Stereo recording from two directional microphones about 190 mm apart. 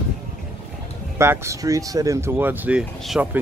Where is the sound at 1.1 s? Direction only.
15° right (ahead or behind).